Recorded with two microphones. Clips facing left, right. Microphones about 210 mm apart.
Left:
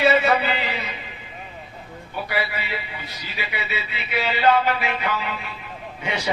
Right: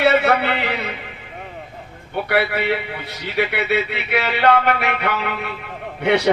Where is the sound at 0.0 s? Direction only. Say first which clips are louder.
Right 2 dB; 65° right (ahead or behind).